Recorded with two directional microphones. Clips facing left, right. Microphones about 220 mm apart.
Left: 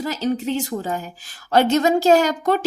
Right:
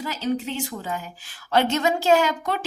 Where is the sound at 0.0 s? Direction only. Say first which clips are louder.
Left 3 dB; 40° left (ahead or behind).